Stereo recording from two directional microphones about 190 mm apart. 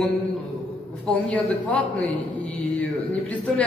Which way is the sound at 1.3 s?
5° left (ahead or behind).